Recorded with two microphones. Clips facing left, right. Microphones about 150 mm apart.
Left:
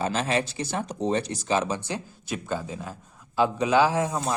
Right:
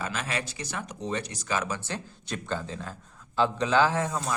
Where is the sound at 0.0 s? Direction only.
30° left (ahead or behind).